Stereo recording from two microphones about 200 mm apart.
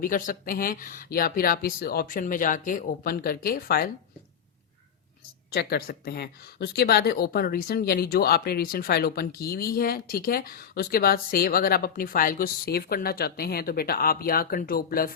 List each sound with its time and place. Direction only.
0.0 s speech: 45° left (ahead or behind)
5.5 s speech: 55° left (ahead or behind)